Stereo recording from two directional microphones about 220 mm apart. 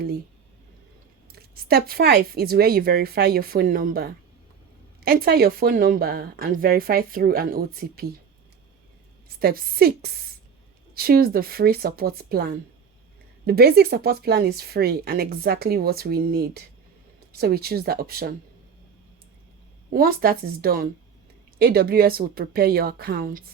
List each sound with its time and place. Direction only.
1.3 s speech: 45° right (ahead or behind)
9.4 s speech: 40° right (ahead or behind)
19.9 s speech: 40° right (ahead or behind)